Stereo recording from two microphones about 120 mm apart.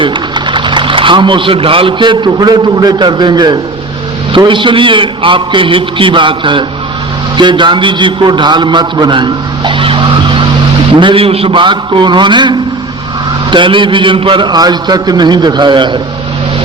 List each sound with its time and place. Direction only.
0.0 s a man's voice: 40° right (ahead or behind)